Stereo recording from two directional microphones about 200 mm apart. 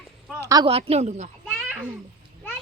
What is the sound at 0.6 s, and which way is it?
Speech, 30° right (ahead or behind).